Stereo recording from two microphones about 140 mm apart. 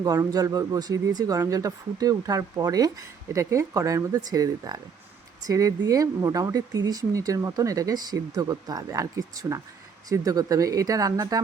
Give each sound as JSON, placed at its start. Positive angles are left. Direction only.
{"t": 0.0, "sound": "speech", "side_deg": -25}